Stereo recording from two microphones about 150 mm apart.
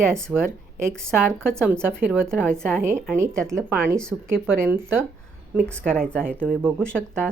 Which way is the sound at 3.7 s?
10° right (ahead or behind).